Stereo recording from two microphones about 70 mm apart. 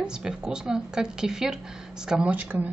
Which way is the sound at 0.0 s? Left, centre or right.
Centre.